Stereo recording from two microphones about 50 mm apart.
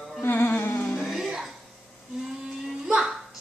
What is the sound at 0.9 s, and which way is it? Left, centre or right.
Music, centre.